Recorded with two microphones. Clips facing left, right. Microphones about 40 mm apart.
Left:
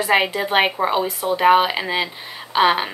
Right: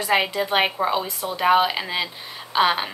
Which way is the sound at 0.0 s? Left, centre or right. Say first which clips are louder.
Left 3 dB; centre.